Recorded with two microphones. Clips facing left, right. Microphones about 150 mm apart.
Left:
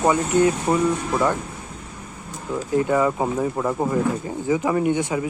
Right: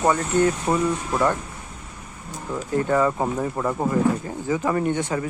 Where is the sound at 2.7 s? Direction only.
10° left (ahead or behind).